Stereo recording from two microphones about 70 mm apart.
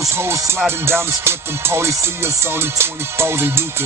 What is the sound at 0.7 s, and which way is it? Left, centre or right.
Music, right.